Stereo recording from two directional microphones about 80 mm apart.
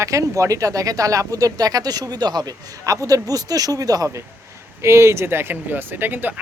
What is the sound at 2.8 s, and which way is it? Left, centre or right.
Speech, right.